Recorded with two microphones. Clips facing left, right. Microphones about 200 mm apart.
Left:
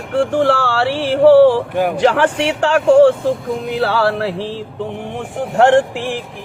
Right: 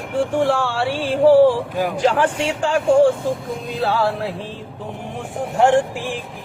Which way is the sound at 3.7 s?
80° left.